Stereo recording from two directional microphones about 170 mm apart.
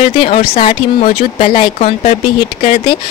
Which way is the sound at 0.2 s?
35° left (ahead or behind).